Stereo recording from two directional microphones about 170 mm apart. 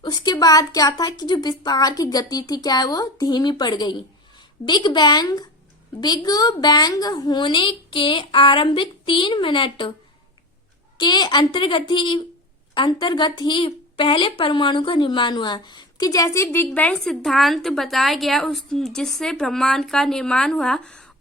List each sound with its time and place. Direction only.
0.0 s a woman's voice: 25° left (ahead or behind)
10.9 s a woman's voice: 25° left (ahead or behind); by 21.0 s 5° left (ahead or behind)